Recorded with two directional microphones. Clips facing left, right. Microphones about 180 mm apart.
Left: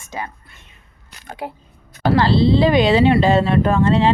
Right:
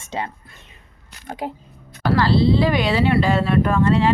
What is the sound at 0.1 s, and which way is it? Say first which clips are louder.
Speech: right 2 dB; 25° right (ahead or behind).